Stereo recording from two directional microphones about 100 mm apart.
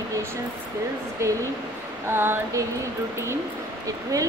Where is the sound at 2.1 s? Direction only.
25° right (ahead or behind).